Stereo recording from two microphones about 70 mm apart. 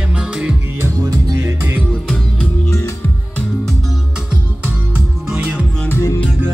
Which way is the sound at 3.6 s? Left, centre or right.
Centre.